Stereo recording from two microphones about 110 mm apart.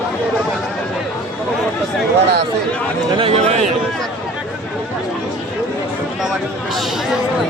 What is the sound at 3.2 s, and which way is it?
Speech, 70° right (ahead or behind).